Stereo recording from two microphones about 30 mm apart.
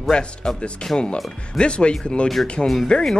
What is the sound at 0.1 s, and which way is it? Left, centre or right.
A man's voice, left.